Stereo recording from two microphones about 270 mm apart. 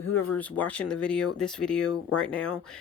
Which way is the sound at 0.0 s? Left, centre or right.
Left.